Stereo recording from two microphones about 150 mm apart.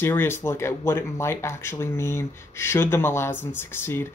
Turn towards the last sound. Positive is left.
turn(degrees=15)  # may be behind; listen again after turning